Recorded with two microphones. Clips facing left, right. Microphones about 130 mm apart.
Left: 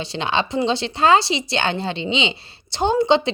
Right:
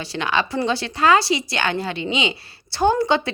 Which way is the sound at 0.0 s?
25° left (ahead or behind).